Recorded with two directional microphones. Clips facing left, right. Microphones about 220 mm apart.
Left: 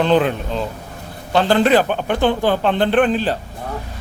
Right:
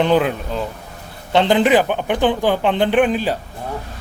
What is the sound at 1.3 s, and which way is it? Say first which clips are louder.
A man's voice: even; 20° right (ahead or behind).